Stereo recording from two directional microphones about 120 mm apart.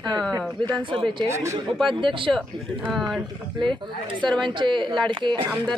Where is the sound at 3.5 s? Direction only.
40° right (ahead or behind).